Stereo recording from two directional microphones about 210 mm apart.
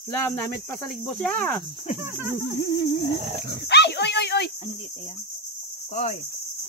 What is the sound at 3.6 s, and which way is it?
Speech, 55° left (ahead or behind).